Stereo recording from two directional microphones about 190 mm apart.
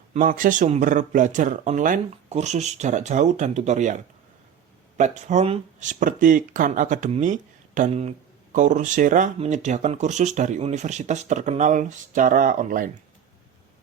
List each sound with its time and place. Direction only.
0.1 s speech: 45° right (ahead or behind)